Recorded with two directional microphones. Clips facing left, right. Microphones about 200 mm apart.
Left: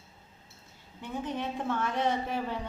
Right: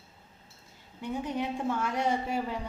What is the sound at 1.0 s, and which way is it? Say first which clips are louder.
A woman's voice: right 2 dB; 10° right (ahead or behind).